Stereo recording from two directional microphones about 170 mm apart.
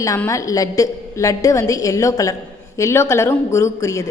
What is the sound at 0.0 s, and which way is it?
A woman's voice, 20° left (ahead or behind).